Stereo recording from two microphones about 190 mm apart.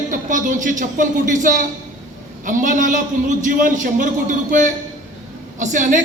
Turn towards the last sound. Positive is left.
turn(degrees=-40)  # may be behind; listen again after turning